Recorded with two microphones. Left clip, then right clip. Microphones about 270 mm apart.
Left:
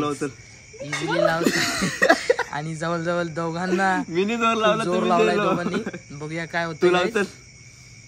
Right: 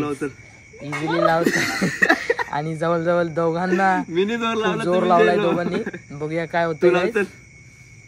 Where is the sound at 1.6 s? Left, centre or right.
Left.